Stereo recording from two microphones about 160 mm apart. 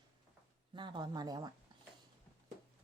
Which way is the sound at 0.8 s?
30° right (ahead or behind).